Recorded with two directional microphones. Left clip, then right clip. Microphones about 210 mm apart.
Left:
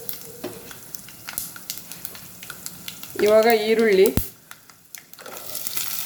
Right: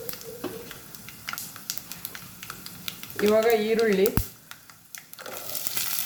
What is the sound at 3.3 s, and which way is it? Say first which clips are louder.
Speech: left 5 dB; 55° left (ahead or behind).